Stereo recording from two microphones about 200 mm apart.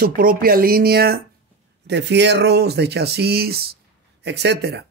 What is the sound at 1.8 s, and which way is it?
A man's voice, 60° right (ahead or behind).